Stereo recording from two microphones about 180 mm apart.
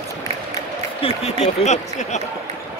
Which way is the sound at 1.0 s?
35° left (ahead or behind).